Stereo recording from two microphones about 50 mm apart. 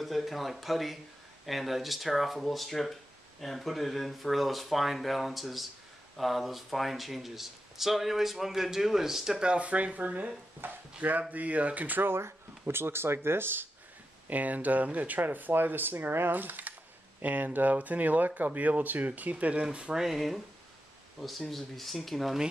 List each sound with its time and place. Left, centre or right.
0.0 s speech: centre
9.5 s speech: right
12.2 s speech: right
14.3 s speech: right
20.0 s speech: centre